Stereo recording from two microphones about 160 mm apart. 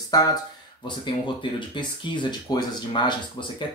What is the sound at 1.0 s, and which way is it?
Speech, 30° left (ahead or behind).